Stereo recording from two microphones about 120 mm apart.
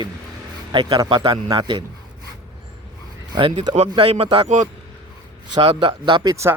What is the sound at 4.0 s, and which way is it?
Speech, 55° right (ahead or behind).